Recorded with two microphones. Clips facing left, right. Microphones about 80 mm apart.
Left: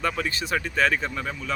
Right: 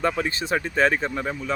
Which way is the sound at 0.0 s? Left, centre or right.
Right.